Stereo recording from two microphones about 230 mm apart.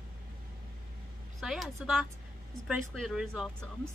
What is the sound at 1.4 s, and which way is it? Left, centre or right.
A woman's voice, centre.